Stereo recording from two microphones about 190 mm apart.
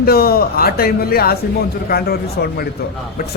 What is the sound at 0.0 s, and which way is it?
A man's voice, 55° left (ahead or behind).